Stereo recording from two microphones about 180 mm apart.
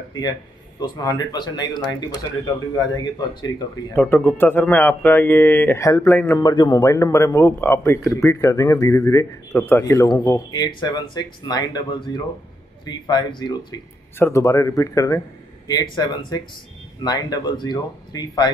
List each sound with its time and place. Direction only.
0.7 s speech: 25° left (ahead or behind)
3.9 s a man's voice: 10° left (ahead or behind)